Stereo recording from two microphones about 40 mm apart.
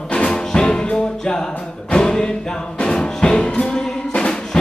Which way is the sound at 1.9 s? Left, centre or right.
Centre.